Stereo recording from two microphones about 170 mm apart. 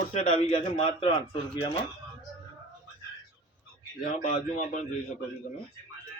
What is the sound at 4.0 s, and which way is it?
Speech, 45° left (ahead or behind).